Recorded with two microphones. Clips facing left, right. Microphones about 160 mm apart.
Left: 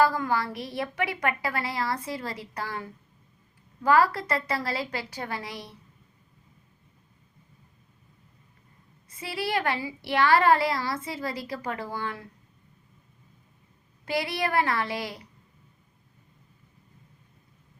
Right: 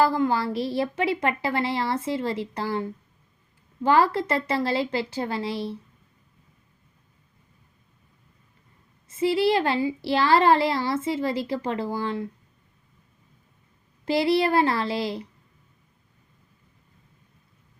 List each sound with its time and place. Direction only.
0.0 s speech: 25° right (ahead or behind)
9.0 s speech: 25° right (ahead or behind)
14.0 s speech: 30° right (ahead or behind)